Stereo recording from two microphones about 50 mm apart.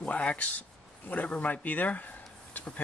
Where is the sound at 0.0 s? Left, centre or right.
Left.